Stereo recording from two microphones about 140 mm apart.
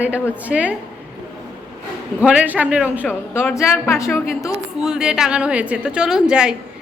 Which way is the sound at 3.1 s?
15° left (ahead or behind).